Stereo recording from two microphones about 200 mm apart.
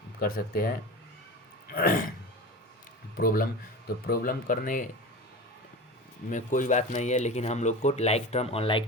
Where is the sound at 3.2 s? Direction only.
45° left (ahead or behind).